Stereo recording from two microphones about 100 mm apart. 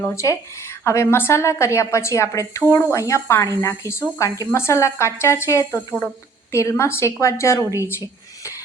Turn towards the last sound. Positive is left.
turn(degrees=30)  # may be behind; listen again after turning